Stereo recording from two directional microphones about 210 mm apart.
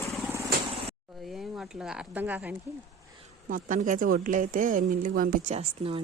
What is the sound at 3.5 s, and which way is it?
A woman's voice, 40° right (ahead or behind).